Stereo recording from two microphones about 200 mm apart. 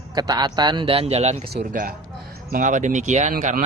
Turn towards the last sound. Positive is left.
turn(degrees=-35)  # may be behind; listen again after turning